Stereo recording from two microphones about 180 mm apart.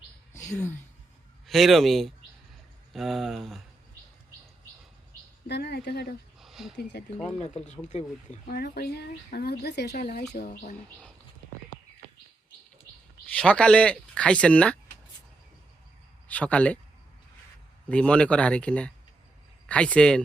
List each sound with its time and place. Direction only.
0.3 s a sound: 40° left (ahead or behind)
1.5 s speech: centre (ahead or behind)
5.5 s speech: 65° left (ahead or behind)
6.4 s a sound: centre (ahead or behind)
6.7 s speech: 70° left (ahead or behind)
7.3 s speech: 40° left (ahead or behind)
8.4 s speech: 65° left (ahead or behind)
10.3 s speech: 50° left (ahead or behind)
13.3 s speech: 5° left (ahead or behind)
16.3 s speech: 5° left (ahead or behind)
17.8 s speech: 5° left (ahead or behind)